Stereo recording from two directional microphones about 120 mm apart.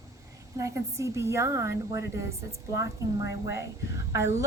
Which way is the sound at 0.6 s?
25° right (ahead or behind).